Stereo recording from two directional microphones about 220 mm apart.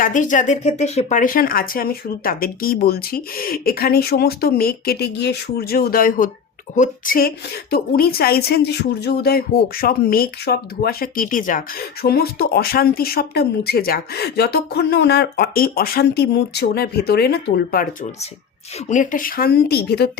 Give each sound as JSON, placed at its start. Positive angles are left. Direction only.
{"t": 0.0, "sound": "a woman's voice", "side_deg": 35}